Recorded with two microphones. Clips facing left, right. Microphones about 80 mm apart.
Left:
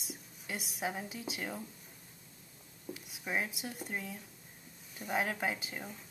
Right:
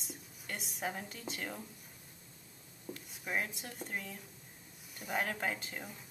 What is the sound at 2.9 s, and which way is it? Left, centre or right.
A woman's voice, centre.